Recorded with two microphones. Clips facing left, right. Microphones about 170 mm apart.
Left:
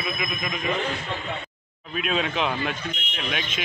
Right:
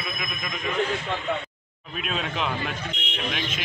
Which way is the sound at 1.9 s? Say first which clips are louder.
Left 4 dB; centre (ahead or behind).